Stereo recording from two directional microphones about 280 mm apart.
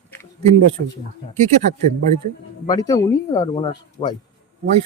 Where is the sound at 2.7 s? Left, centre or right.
Centre.